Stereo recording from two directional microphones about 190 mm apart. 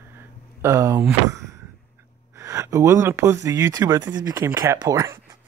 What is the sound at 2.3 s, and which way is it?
Speech, 15° right (ahead or behind).